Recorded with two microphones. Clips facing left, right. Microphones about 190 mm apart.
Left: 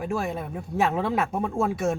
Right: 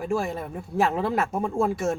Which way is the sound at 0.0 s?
Centre (ahead or behind).